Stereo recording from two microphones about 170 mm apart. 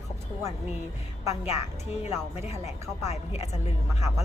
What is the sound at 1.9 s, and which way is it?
Speech, 40° left (ahead or behind).